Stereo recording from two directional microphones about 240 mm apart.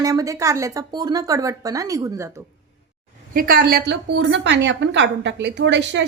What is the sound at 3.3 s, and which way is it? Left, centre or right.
A woman's voice, right.